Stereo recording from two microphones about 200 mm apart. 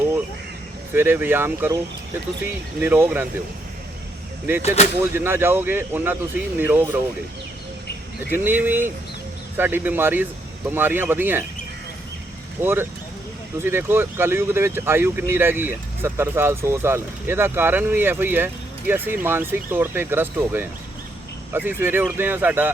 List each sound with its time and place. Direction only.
0.9 s speech: 10° right (ahead or behind)
4.6 s speech: 30° left (ahead or behind)
5.1 s speech: 10° right (ahead or behind)
8.3 s speech: 10° right (ahead or behind)
12.6 s speech: 10° right (ahead or behind)